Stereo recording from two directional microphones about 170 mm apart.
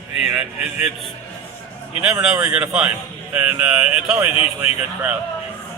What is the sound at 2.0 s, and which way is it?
Speech, 10° right (ahead or behind).